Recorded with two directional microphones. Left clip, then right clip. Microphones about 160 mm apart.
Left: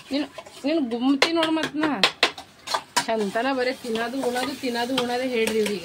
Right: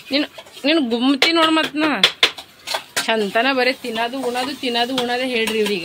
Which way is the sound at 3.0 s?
10° right (ahead or behind).